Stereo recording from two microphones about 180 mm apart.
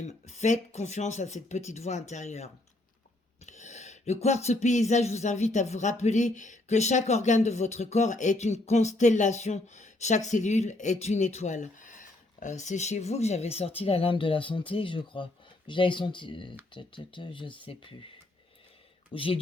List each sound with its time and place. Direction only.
0.0 s a sound: 40° left (ahead or behind)
16.7 s speech: 25° left (ahead or behind)
19.1 s speech: 30° left (ahead or behind)